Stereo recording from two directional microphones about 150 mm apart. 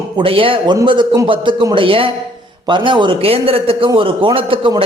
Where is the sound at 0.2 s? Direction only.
35° right (ahead or behind).